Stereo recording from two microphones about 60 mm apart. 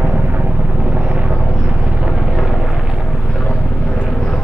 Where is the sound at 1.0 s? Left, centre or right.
Centre.